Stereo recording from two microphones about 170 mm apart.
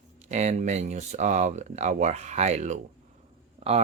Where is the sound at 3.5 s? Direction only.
35° right (ahead or behind).